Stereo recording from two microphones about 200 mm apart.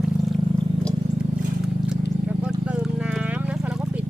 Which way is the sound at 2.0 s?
60° left (ahead or behind).